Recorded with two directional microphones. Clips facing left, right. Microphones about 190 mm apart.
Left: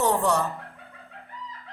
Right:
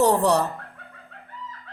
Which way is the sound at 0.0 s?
40° right (ahead or behind).